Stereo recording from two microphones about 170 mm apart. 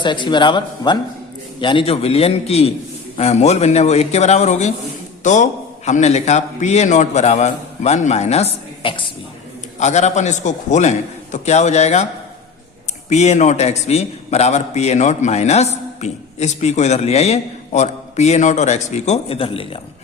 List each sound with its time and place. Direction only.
0.0 s a man's voice: 25° left (ahead or behind)
9.8 s a man's voice: 40° left (ahead or behind)
13.1 s a man's voice: 40° left (ahead or behind)